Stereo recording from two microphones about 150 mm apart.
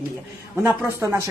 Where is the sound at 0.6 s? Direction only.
20° right (ahead or behind).